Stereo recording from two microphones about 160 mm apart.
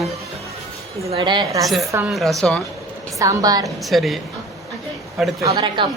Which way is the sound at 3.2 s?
20° right (ahead or behind).